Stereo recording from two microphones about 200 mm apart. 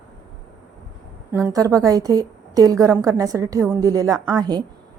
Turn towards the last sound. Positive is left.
turn(degrees=-20)  # may be behind; listen again after turning